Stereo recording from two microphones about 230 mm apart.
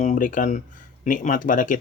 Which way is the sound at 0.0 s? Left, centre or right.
Left.